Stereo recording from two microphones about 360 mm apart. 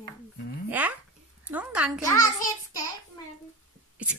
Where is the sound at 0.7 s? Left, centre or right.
Centre.